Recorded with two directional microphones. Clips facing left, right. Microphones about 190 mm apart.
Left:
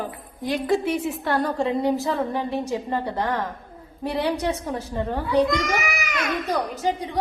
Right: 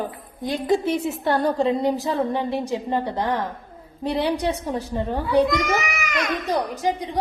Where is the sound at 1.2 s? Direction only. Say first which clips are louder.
Right 4 dB; 25° right (ahead or behind).